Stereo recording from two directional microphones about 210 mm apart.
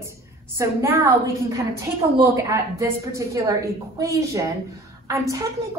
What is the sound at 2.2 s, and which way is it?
A woman's voice, 15° right (ahead or behind).